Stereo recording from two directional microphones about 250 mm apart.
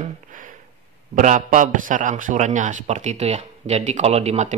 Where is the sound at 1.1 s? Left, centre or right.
Right.